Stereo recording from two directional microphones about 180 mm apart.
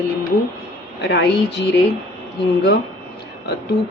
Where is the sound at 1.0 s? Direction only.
65° left (ahead or behind).